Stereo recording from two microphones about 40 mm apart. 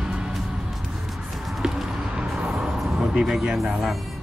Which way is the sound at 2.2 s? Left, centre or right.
Centre.